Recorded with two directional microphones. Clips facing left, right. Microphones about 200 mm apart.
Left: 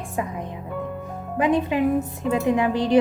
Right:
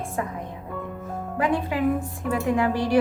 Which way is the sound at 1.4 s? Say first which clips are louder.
Left 3 dB; 20° left (ahead or behind).